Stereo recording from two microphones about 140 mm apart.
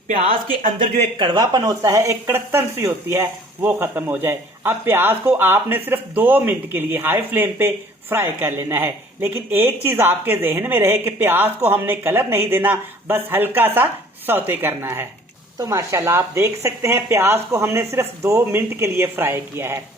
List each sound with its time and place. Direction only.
1.2 s speech: 30° right (ahead or behind)